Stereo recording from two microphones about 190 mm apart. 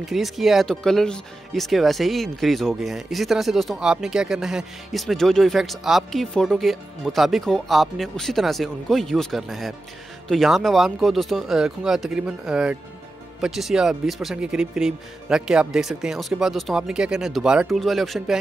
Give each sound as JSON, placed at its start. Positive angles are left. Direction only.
{"t": 0.0, "sound": "speech", "side_deg": 0}